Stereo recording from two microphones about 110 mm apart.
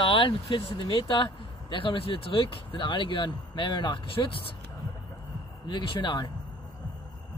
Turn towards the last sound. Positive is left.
turn(degrees=50)  # may be behind; listen again after turning